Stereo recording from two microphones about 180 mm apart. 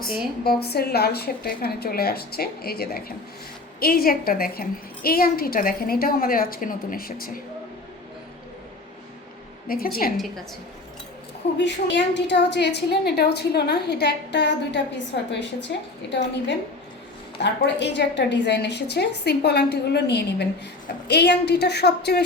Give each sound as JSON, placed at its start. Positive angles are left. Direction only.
{"t": 0.4, "sound": "a woman's voice", "side_deg": 60}
{"t": 9.6, "sound": "a woman's voice", "side_deg": 55}
{"t": 11.5, "sound": "a woman's voice", "side_deg": 75}
{"t": 17.4, "sound": "a woman's voice", "side_deg": 75}